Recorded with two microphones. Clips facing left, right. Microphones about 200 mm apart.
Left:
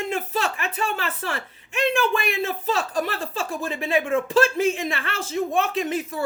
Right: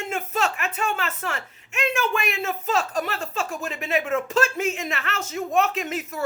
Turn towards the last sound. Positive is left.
turn(degrees=30)  # may be behind; listen again after turning